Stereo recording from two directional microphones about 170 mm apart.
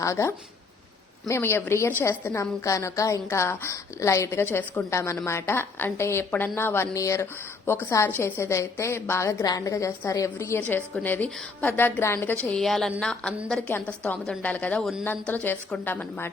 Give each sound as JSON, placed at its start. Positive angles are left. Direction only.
{"t": 0.0, "sound": "a woman's voice", "side_deg": 15}